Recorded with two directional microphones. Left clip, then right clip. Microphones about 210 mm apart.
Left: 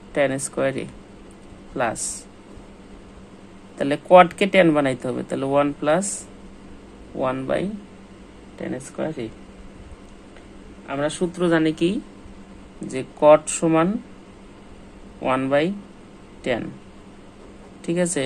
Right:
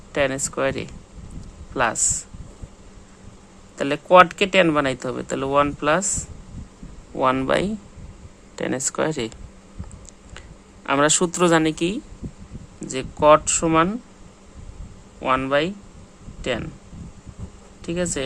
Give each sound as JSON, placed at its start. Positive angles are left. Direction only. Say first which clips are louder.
{"t": 0.1, "sound": "a man's voice", "louder": "left 1 dB", "side_deg": -15}
{"t": 3.8, "sound": "speech", "louder": "even", "side_deg": -20}
{"t": 7.2, "sound": "speech", "louder": "right 4 dB", "side_deg": -30}
{"t": 8.5, "sound": "speech", "louder": "right 6 dB", "side_deg": -40}
{"t": 10.8, "sound": "speech", "louder": "right 6 dB", "side_deg": -45}
{"t": 15.2, "sound": "speech", "louder": "even", "side_deg": -15}
{"t": 17.8, "sound": "speech", "louder": "left 3 dB", "side_deg": -10}